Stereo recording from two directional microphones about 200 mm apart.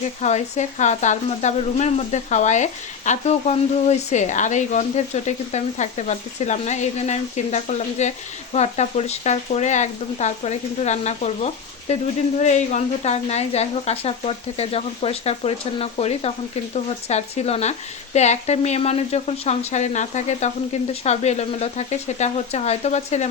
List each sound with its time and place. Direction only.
0.2 s speech: 35° left (ahead or behind)